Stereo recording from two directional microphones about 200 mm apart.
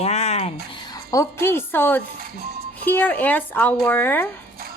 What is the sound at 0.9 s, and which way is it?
A woman's voice, 15° left (ahead or behind).